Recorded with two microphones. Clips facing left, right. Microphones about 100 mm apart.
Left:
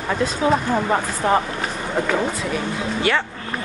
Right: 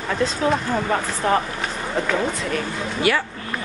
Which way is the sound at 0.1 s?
15° left (ahead or behind).